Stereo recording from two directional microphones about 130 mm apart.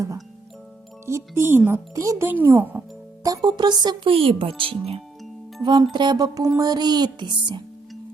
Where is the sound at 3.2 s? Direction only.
25° right (ahead or behind); by 5.0 s 45° right (ahead or behind).